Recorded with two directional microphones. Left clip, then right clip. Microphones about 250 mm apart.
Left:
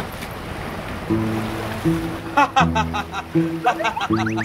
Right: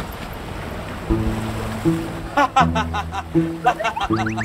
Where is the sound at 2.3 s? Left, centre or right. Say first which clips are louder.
Even; centre.